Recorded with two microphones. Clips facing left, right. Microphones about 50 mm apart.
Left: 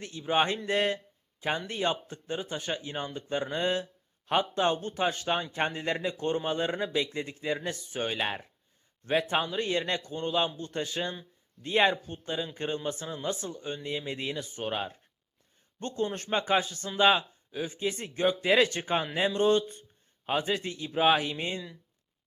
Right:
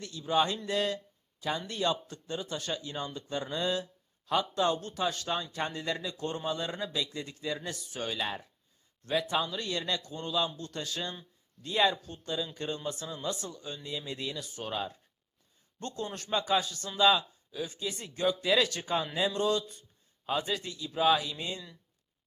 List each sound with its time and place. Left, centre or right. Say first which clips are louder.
0.0 s speech: left 1 dB; left
11.6 s speech: left 3 dB; left